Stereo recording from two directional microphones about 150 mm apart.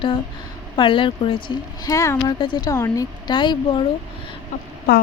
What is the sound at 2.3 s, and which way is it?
Speech, 35° left (ahead or behind).